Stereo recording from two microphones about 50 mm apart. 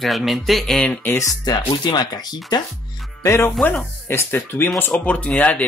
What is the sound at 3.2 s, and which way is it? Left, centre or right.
Speech, left.